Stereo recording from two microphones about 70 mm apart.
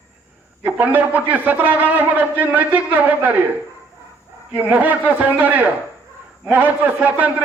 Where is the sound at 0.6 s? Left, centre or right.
Right.